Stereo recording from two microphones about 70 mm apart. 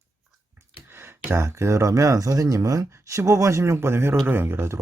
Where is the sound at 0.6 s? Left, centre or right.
Right.